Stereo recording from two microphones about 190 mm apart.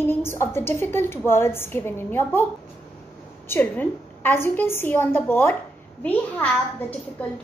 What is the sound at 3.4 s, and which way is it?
A woman's voice, 10° left (ahead or behind).